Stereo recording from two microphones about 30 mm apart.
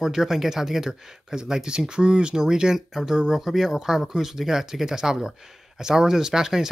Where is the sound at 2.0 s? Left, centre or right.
Right.